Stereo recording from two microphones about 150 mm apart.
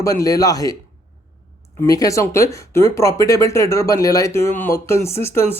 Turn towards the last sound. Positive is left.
turn(degrees=20)  # may be behind; listen again after turning